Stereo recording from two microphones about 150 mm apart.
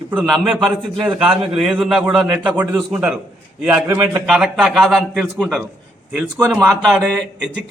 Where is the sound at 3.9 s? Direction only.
20° right (ahead or behind).